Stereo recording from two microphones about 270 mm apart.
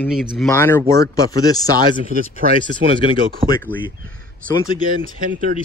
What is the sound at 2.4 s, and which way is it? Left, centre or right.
Speech, right.